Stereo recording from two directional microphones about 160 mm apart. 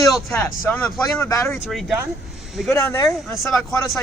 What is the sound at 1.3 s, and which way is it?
Speech, 20° left (ahead or behind).